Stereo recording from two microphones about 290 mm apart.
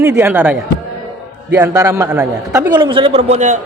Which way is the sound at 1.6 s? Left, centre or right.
Centre.